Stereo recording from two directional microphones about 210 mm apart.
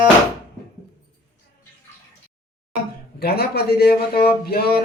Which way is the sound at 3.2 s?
50° left (ahead or behind).